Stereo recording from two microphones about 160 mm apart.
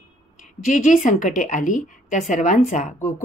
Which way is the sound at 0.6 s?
50° left (ahead or behind).